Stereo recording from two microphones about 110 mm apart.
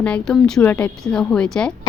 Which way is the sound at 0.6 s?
20° left (ahead or behind).